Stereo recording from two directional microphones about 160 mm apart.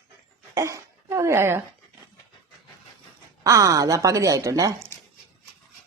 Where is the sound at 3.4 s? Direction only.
20° right (ahead or behind).